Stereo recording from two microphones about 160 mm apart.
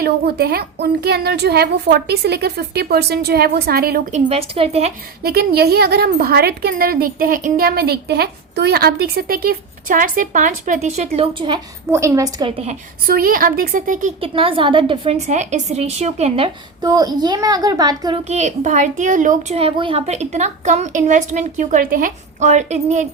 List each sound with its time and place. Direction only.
0.0 s a woman's voice: 75° right (ahead or behind)
4.1 s a woman's voice: 45° right (ahead or behind)
5.2 s a woman's voice: 75° right (ahead or behind); by 11.6 s 30° right (ahead or behind)
11.9 s a woman's voice: 20° right (ahead or behind)
12.5 s a woman's voice: 35° right (ahead or behind)
13.1 s a woman's voice: 65° right (ahead or behind)
14.2 s a woman's voice: 35° right (ahead or behind)
16.8 s a woman's voice: 25° right (ahead or behind)
18.3 s a child's voice: 45° right (ahead or behind)